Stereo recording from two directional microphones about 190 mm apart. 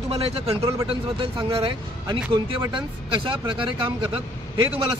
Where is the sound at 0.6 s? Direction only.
15° right (ahead or behind).